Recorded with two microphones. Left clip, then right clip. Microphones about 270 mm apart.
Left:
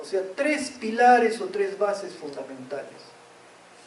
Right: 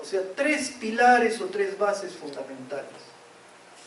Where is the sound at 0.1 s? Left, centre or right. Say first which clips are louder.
Even; centre.